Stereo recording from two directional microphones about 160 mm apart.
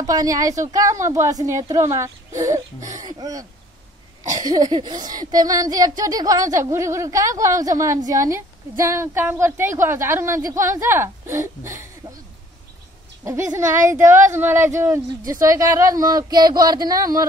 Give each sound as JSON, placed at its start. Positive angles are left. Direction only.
{"t": 0.0, "sound": "speech", "side_deg": -20}
{"t": 4.5, "sound": "speech", "side_deg": -25}
{"t": 13.2, "sound": "speech", "side_deg": -20}